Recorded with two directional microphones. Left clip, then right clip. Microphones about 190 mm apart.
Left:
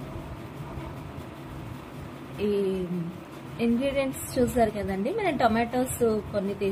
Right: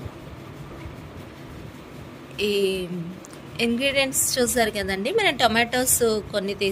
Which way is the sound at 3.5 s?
70° right (ahead or behind).